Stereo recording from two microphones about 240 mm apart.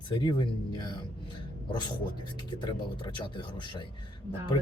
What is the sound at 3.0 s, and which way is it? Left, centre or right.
Speech, centre.